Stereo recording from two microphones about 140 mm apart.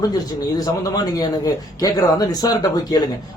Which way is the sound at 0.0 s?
30° left (ahead or behind).